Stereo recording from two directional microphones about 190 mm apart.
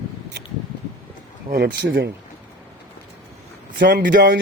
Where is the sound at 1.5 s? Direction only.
55° right (ahead or behind).